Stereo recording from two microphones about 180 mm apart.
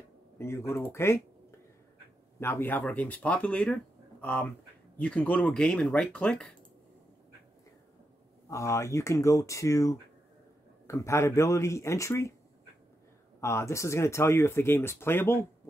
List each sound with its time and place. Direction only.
0.4 s speech: 15° left (ahead or behind)
2.4 s speech: 10° left (ahead or behind)
8.5 s speech: 15° left (ahead or behind)
13.4 s speech: 15° left (ahead or behind)